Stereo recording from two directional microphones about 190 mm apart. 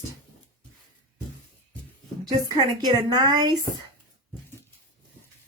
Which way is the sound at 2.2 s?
20° right (ahead or behind).